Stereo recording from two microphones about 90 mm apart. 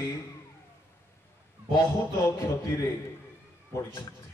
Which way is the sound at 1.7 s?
40° left (ahead or behind).